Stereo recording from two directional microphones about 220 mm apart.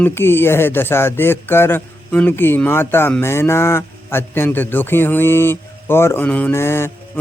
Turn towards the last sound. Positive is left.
turn(degrees=10)  # may be behind; listen again after turning